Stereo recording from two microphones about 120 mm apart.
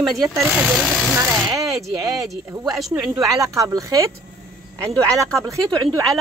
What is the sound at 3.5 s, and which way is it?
Speech, 30° right (ahead or behind).